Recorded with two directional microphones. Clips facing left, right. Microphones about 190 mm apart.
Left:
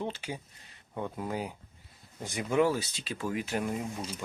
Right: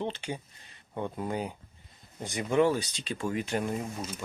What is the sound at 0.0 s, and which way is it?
Speech, 5° left (ahead or behind).